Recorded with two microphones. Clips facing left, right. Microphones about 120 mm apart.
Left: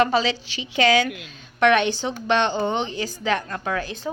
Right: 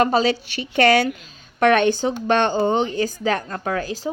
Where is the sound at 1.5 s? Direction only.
45° right (ahead or behind).